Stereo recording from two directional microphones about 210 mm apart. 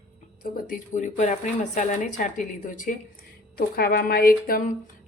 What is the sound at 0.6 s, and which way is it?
A woman's voice, 40° left (ahead or behind).